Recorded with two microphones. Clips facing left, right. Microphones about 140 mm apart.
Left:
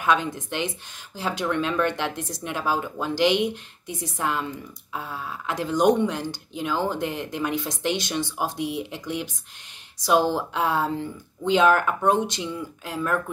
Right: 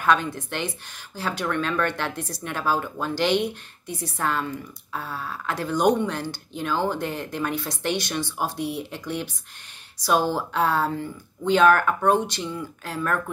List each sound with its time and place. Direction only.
0.0 s speech: 20° left (ahead or behind)